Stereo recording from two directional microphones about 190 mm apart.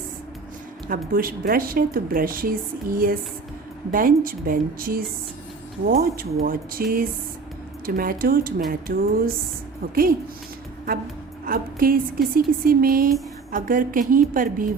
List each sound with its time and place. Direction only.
0.9 s speech: 50° right (ahead or behind)
11.4 s speech: 50° right (ahead or behind)